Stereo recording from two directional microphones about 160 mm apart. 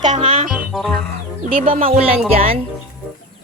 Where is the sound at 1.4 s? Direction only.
60° right (ahead or behind).